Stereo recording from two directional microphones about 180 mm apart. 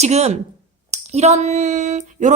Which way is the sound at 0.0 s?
35° right (ahead or behind).